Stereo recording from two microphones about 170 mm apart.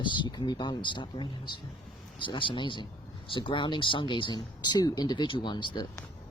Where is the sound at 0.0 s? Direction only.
30° left (ahead or behind).